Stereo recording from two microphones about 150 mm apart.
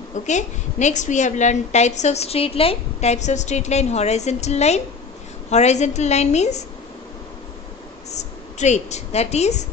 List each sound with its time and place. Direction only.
0.1 s a woman's voice: 50° left (ahead or behind)
8.1 s speech: 50° left (ahead or behind)